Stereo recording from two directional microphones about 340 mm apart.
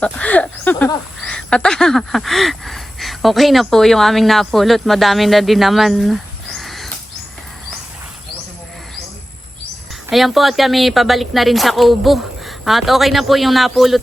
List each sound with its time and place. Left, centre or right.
0.0 s speech: centre
10.1 s a woman's voice: centre